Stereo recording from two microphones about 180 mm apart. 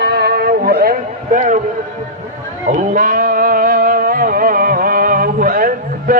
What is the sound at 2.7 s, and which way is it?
Music, 45° right (ahead or behind).